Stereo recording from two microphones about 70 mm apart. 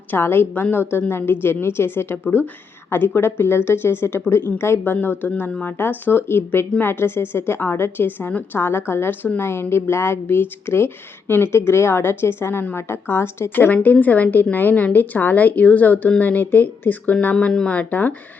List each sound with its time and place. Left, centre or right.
0.1 s a woman's voice: left
3.2 s a woman's voice: left